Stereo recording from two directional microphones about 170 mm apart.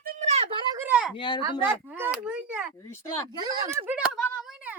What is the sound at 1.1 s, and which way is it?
Speech, 30° left (ahead or behind).